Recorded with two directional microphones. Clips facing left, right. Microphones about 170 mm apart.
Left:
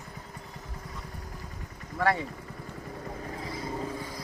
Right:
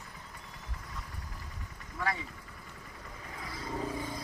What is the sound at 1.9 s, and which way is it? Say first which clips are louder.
Speech: left 8 dB; 60° left (ahead or behind).